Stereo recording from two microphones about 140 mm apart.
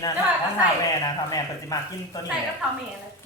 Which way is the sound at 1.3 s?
25° left (ahead or behind).